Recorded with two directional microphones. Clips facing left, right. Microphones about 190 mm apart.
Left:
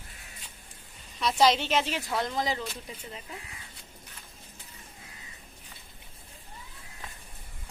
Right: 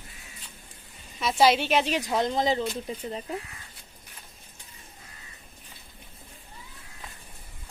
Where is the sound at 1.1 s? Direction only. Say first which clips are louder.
Right 2 dB; 5° right (ahead or behind); by 3.4 s 35° right (ahead or behind).